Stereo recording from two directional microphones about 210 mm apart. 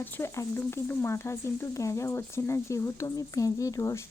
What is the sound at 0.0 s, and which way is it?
Speech, 10° left (ahead or behind).